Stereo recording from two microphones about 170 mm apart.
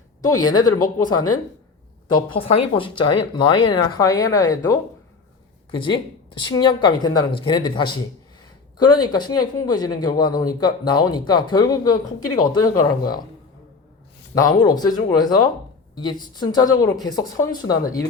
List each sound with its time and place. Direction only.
0.2 s speech: 20° left (ahead or behind)
14.6 s speech: 20° left (ahead or behind)